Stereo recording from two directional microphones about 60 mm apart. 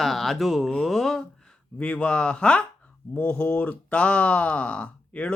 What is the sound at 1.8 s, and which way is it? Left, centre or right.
Speech, left.